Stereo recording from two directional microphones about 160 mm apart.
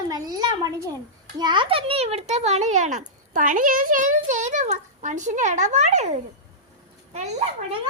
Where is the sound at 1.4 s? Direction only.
30° right (ahead or behind); by 7.4 s 45° right (ahead or behind).